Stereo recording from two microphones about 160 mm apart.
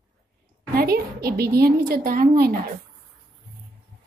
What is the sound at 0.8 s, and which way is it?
A woman's voice, 75° right (ahead or behind).